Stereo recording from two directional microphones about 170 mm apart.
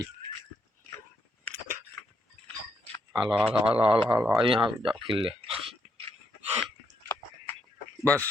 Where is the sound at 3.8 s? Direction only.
30° right (ahead or behind).